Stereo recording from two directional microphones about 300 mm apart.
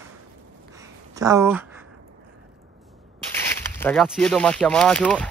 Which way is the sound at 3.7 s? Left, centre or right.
Centre.